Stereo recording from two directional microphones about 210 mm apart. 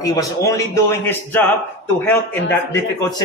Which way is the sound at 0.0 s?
15° left (ahead or behind).